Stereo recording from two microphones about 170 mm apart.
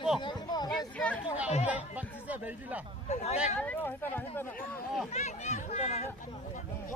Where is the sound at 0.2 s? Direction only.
25° left (ahead or behind).